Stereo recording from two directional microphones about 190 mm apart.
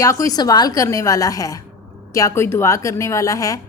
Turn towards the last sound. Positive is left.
turn(degrees=15)  # may be behind; listen again after turning